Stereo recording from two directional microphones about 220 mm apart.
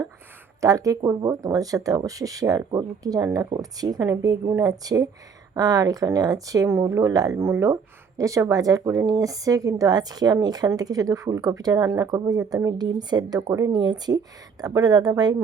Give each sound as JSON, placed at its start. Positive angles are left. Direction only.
{"t": 0.6, "sound": "a woman's voice", "side_deg": -15}